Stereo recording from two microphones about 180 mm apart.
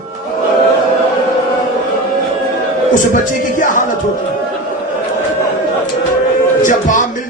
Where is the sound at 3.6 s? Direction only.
45° left (ahead or behind).